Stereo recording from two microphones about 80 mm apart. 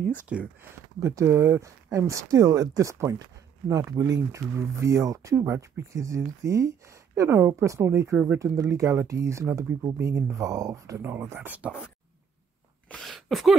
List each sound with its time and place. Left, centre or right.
0.3 s speech: centre
0.9 s speech: right
4.6 s speech: right
13.0 s speech: centre